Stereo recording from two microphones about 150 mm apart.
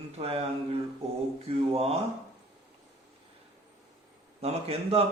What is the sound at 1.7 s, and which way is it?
Speech, 40° right (ahead or behind).